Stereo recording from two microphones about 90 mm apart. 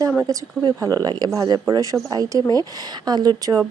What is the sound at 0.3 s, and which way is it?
Speech, 40° right (ahead or behind).